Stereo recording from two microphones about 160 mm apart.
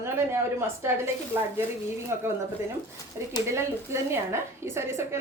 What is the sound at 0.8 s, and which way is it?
Speech, 15° right (ahead or behind).